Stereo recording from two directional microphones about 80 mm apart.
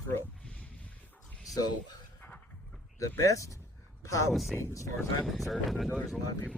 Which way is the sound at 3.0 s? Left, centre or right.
Left.